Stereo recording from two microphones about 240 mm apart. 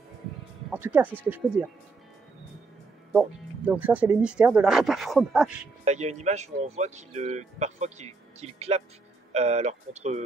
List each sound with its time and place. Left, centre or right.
0.7 s speech: centre
3.1 s speech: centre
5.9 s speech: right